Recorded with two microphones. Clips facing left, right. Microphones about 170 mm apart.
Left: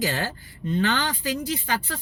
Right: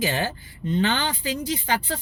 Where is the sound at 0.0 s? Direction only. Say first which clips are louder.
Right 2 dB; 20° right (ahead or behind).